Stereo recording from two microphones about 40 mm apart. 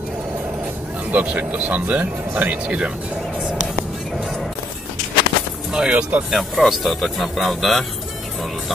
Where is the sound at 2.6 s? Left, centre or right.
Right.